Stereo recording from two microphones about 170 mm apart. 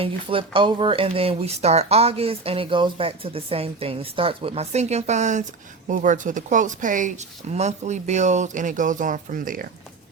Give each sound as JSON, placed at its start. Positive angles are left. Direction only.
{"t": 0.0, "sound": "speech", "side_deg": -30}